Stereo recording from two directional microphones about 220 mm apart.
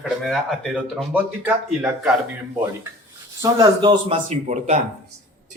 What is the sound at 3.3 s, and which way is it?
A man's voice, 15° right (ahead or behind).